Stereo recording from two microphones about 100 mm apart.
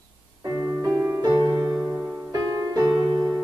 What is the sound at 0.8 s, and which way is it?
Music, 30° right (ahead or behind).